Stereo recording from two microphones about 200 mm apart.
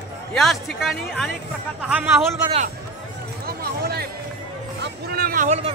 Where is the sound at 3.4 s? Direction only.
50° right (ahead or behind).